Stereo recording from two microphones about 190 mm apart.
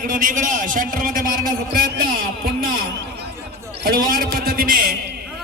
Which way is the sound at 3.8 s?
50° right (ahead or behind).